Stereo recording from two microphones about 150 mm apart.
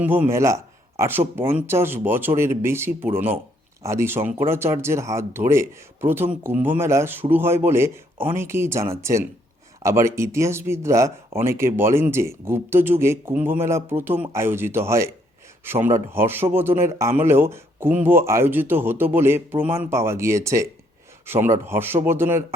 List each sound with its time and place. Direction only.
0.0 s speech: 15° right (ahead or behind)